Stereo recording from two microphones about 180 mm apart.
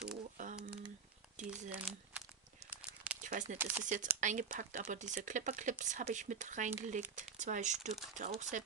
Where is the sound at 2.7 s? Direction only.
10° right (ahead or behind).